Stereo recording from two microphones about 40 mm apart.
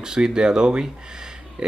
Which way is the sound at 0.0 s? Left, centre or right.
Centre.